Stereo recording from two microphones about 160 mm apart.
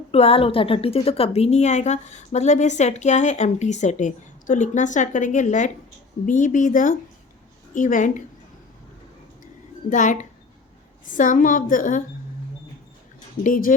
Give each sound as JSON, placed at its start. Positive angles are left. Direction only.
{"t": 0.1, "sound": "a woman's voice", "side_deg": 40}
{"t": 9.9, "sound": "a woman's voice", "side_deg": 50}
{"t": 11.2, "sound": "a woman's voice", "side_deg": 55}
{"t": 13.4, "sound": "a woman's voice", "side_deg": 60}